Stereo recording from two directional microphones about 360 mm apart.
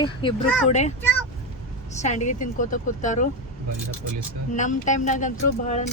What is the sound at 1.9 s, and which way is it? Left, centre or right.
Speech, centre.